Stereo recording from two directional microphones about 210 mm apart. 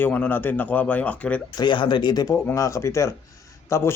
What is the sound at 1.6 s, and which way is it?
Speech, 20° left (ahead or behind).